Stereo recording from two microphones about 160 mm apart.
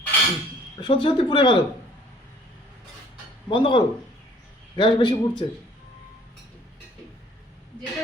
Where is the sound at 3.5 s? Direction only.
30° left (ahead or behind).